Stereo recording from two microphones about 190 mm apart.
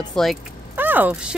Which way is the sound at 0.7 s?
10° right (ahead or behind).